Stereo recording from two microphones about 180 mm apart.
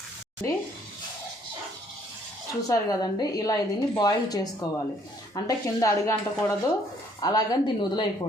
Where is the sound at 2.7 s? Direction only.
20° left (ahead or behind).